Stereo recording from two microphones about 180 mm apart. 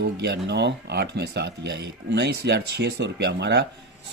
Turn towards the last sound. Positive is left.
turn(degrees=-70)  # may be behind; listen again after turning